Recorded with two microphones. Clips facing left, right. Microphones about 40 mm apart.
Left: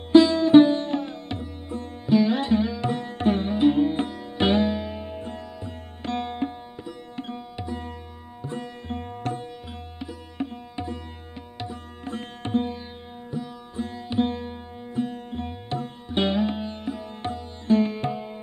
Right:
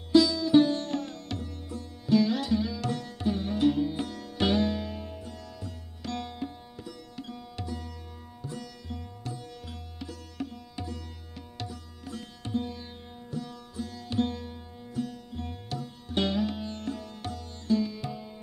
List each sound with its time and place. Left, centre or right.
0.1 s music: left
0.7 s sitar: left
3.4 s music: left
4.1 s sitar: left
7.2 s music: left
8.4 s sitar: left
9.9 s music: left
11.5 s tabla: left
12.0 s sitar: left
13.3 s sitar: left
13.7 s music: left
17.2 s music: left